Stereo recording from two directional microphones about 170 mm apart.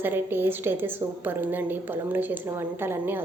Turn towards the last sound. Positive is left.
turn(degrees=-15)  # may be behind; listen again after turning